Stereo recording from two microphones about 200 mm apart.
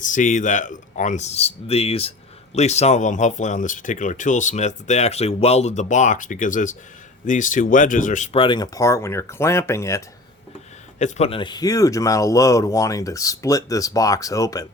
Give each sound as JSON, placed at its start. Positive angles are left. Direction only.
{"t": 0.0, "sound": "speech", "side_deg": 40}
{"t": 11.0, "sound": "speech", "side_deg": 30}